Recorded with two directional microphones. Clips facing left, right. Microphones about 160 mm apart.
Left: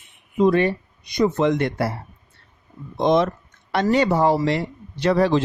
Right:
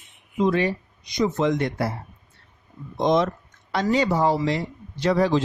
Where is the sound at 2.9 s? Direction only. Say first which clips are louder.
Left 2 dB; 60° left (ahead or behind).